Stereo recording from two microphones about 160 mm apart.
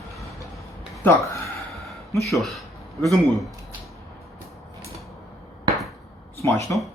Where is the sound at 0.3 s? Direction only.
20° left (ahead or behind).